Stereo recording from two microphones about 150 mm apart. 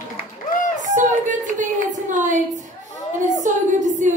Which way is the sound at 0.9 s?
55° right (ahead or behind).